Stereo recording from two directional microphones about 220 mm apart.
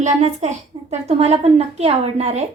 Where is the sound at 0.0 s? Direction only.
30° right (ahead or behind).